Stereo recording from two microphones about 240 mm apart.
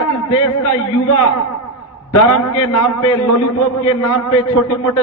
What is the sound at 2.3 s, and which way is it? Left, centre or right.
A man's voice, left.